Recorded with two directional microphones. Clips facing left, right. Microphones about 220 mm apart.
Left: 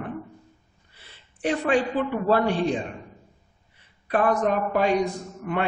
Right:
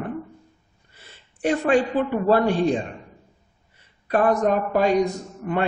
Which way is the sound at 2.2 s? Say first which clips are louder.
Right 3 dB; 45° right (ahead or behind).